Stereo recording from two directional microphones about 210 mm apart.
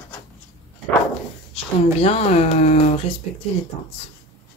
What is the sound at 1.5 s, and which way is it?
Speech, 30° left (ahead or behind).